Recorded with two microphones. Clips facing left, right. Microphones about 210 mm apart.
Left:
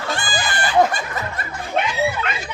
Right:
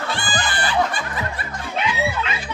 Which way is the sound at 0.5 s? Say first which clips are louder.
Left 6 dB; 45° left (ahead or behind).